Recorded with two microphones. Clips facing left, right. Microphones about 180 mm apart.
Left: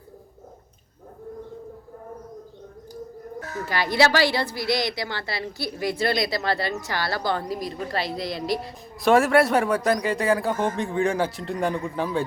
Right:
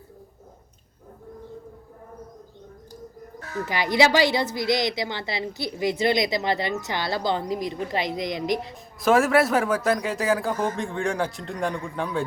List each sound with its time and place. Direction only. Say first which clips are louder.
3.7 s a woman's voice: right 1 dB; 20° right (ahead or behind)
9.0 s speech: left 1 dB; centre (ahead or behind)